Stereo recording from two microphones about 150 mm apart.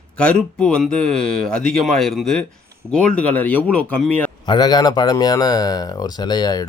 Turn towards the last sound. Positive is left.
turn(degrees=25)  # may be behind; listen again after turning